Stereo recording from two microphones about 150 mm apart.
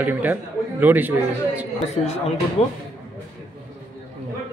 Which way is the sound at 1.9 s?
45° left (ahead or behind).